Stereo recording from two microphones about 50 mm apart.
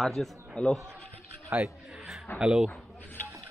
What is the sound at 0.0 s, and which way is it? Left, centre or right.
Speech, centre.